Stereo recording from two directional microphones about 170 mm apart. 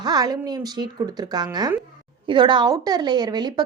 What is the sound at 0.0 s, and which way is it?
Speech, 20° right (ahead or behind).